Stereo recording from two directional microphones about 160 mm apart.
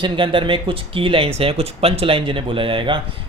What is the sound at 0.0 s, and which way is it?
Speech, 30° right (ahead or behind).